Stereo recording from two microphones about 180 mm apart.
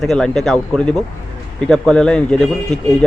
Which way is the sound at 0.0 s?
Centre (ahead or behind).